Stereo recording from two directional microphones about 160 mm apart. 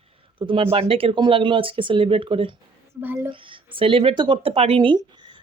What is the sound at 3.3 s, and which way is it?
Speech, 30° right (ahead or behind).